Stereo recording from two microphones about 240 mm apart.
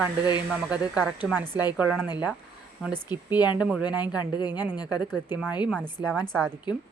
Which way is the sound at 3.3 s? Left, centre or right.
Centre.